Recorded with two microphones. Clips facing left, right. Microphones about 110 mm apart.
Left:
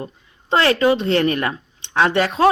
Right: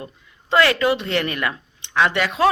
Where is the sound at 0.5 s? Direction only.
30° left (ahead or behind).